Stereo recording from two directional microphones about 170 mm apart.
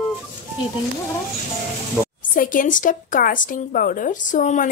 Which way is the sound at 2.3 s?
55° left (ahead or behind).